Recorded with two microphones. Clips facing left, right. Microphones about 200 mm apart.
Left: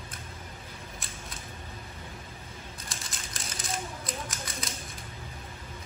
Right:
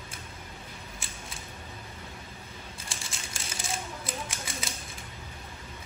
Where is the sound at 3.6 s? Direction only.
30° right (ahead or behind).